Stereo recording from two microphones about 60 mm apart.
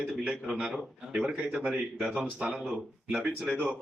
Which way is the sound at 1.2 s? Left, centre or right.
Centre.